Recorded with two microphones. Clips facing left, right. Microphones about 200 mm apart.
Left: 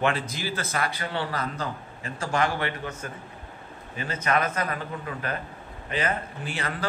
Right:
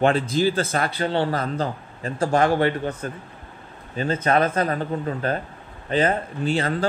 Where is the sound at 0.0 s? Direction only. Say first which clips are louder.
Right 8 dB; 30° right (ahead or behind).